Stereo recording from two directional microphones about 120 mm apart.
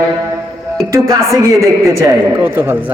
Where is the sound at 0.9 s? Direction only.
25° right (ahead or behind).